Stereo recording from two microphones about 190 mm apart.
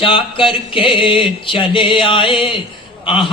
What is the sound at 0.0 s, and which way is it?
Speech, 25° left (ahead or behind).